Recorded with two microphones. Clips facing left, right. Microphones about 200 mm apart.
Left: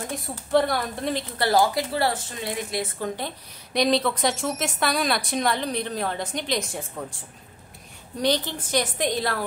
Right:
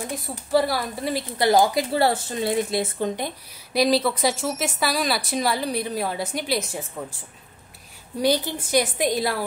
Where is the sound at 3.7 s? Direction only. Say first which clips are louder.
Right 2 dB; 5° right (ahead or behind).